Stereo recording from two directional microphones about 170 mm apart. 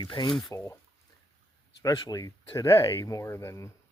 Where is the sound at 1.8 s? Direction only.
20° left (ahead or behind).